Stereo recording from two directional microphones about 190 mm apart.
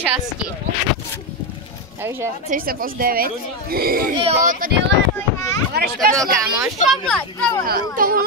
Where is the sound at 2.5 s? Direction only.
50° right (ahead or behind).